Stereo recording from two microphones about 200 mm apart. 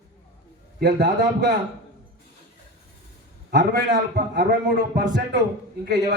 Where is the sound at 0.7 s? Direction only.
55° right (ahead or behind).